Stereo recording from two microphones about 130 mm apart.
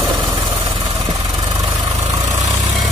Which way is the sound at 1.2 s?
35° right (ahead or behind).